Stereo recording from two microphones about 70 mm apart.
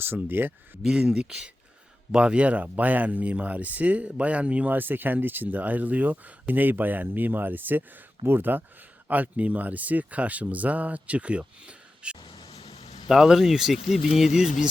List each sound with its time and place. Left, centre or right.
0.0 s speech: right
0.8 s speech: centre